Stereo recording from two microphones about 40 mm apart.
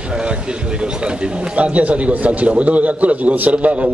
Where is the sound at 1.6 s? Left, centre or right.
Right.